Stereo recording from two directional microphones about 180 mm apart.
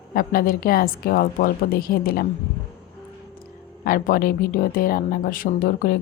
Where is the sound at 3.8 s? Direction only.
50° left (ahead or behind).